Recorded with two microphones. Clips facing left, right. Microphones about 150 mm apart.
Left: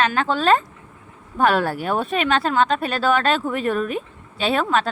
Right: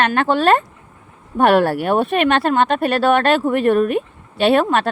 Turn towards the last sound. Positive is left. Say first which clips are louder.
# right 5 dB
turn(degrees=-60)  # may be behind; listen again after turning